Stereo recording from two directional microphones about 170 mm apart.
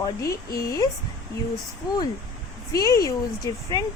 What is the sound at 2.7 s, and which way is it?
A woman's voice, 20° left (ahead or behind).